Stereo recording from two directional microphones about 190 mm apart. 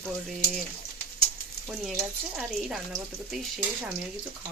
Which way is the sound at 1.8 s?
5° right (ahead or behind).